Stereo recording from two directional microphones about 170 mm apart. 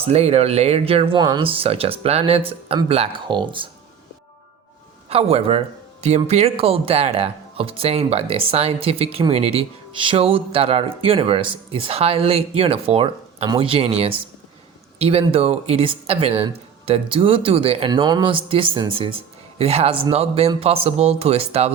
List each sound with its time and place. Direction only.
0.1 s speech: 40° right (ahead or behind)
5.0 s speech: 35° right (ahead or behind)